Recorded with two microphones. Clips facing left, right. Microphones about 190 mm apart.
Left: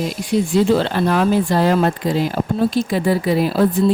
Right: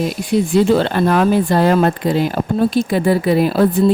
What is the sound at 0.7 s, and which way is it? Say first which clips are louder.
Speech: right 2 dB; 55° right (ahead or behind).